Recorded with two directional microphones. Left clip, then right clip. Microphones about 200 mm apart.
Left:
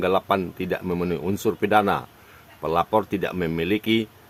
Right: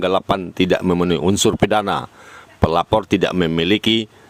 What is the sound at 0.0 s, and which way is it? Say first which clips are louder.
Speech: right 3 dB; 50° right (ahead or behind).